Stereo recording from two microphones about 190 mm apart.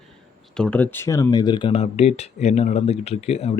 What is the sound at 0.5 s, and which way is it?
Speech, 5° left (ahead or behind).